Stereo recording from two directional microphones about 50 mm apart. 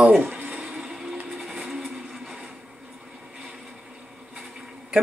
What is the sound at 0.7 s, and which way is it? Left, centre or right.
Vehicle, centre.